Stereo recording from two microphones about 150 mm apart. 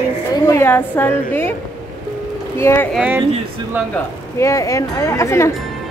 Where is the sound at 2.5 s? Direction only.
15° left (ahead or behind).